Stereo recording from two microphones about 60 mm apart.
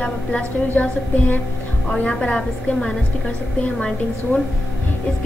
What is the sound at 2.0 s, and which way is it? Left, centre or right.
A woman's voice, centre.